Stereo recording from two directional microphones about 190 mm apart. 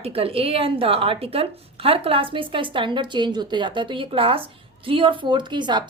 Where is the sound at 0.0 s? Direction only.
30° right (ahead or behind).